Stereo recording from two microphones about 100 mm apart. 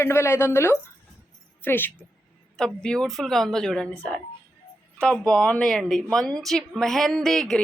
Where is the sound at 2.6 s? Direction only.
5° left (ahead or behind).